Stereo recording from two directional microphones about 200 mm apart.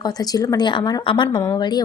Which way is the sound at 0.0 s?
20° left (ahead or behind).